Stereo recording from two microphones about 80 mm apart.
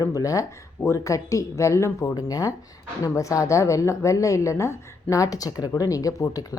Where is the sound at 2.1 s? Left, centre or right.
Left.